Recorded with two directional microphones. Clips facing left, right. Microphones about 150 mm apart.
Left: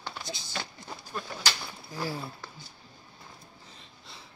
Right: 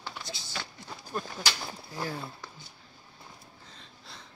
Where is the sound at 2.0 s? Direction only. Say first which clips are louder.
Left 2 dB; 10° left (ahead or behind).